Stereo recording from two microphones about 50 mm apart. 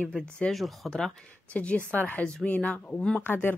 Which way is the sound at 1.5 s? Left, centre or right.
Left.